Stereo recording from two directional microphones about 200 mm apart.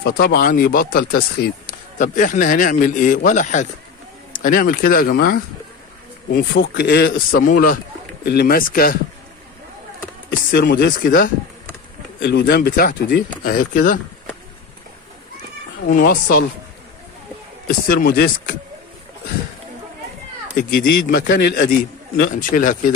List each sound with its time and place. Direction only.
0.0 s speech: 50° left (ahead or behind)
10.5 s speech: 55° left (ahead or behind)
12.2 s speech: 55° left (ahead or behind)
15.9 s speech: 45° left (ahead or behind)
17.8 s speech: 50° left (ahead or behind)
20.5 s speech: 55° left (ahead or behind)